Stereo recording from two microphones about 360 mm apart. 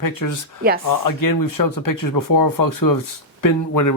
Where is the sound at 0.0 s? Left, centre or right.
Left.